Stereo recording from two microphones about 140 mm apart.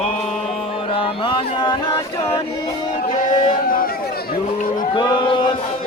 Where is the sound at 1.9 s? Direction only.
20° left (ahead or behind).